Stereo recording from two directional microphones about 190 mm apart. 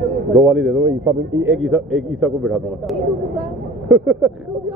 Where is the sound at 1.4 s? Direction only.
Centre (ahead or behind).